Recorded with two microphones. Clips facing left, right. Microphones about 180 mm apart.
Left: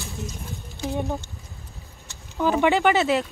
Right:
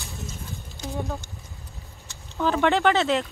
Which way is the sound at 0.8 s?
20° left (ahead or behind).